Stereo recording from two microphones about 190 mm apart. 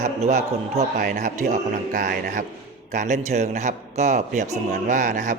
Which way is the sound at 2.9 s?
40° right (ahead or behind).